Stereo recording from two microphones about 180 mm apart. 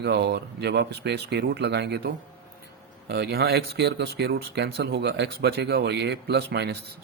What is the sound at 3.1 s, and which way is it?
Speech, 60° right (ahead or behind).